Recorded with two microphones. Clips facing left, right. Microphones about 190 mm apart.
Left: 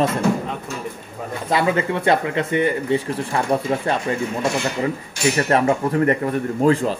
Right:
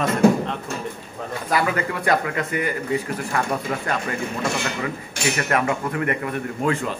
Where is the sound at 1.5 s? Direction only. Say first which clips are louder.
Left 3 dB; 25° left (ahead or behind).